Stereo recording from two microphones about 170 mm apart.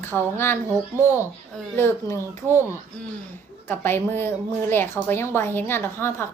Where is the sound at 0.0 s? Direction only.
15° left (ahead or behind).